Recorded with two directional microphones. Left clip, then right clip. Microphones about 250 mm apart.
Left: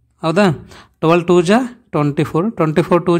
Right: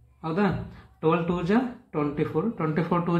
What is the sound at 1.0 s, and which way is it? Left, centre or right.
Speech, left.